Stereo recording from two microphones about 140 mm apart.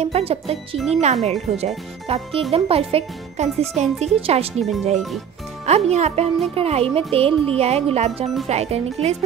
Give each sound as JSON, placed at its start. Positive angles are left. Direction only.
{"t": 0.0, "sound": "speech", "side_deg": -45}
{"t": 0.7, "sound": "speech", "side_deg": 0}
{"t": 1.0, "sound": "speech", "side_deg": -50}
{"t": 4.6, "sound": "speech", "side_deg": 0}
{"t": 5.9, "sound": "speech", "side_deg": -50}